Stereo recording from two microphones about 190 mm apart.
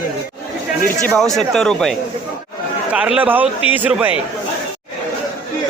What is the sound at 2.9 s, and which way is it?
Speech, 5° right (ahead or behind).